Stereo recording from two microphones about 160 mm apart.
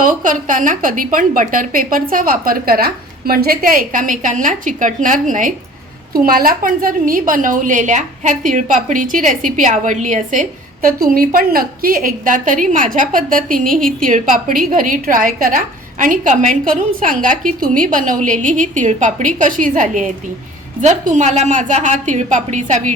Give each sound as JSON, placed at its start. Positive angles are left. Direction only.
{"t": 0.0, "sound": "a woman's voice", "side_deg": -55}
{"t": 10.8, "sound": "a woman's voice", "side_deg": -65}